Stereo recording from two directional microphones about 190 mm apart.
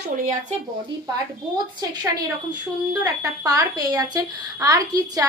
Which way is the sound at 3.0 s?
20° right (ahead or behind).